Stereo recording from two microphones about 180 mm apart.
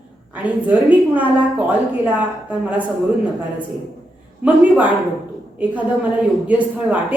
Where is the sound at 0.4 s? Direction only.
10° right (ahead or behind).